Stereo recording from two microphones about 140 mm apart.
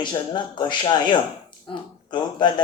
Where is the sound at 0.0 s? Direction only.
35° left (ahead or behind).